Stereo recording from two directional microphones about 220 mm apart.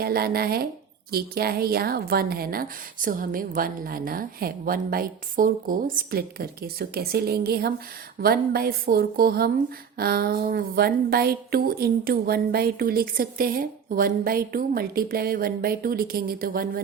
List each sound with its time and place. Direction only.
0.0 s a woman's voice: 45° right (ahead or behind)